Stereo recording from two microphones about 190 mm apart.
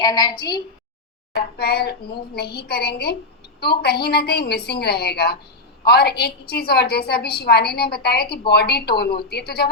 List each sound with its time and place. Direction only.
0.0 s a woman's voice: 20° left (ahead or behind)
1.4 s a woman's voice: 55° left (ahead or behind)